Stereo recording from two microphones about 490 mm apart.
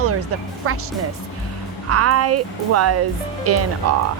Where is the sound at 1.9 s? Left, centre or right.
Right.